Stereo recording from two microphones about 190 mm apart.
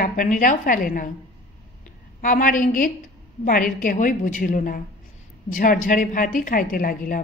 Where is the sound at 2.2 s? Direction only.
45° left (ahead or behind).